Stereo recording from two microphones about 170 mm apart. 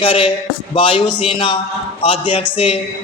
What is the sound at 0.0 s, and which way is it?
A man's voice, 30° left (ahead or behind).